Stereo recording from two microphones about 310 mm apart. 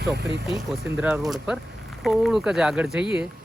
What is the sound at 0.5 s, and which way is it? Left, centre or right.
Speech, centre.